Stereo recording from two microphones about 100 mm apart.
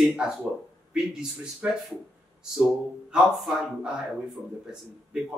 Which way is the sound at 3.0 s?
5° right (ahead or behind).